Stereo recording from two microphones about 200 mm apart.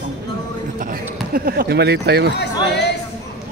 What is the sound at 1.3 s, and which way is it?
Speech, 50° right (ahead or behind).